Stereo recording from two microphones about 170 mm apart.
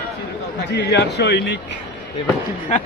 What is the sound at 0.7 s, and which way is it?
Speech, 80° left.